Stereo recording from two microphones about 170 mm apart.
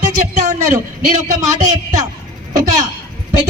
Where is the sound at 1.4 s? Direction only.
45° right (ahead or behind).